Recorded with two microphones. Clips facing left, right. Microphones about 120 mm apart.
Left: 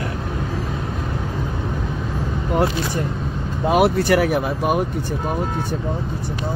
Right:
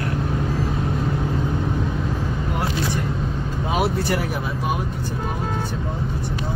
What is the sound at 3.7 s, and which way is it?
Speech, 70° left (ahead or behind).